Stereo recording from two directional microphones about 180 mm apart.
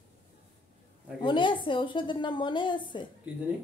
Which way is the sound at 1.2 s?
25° left (ahead or behind).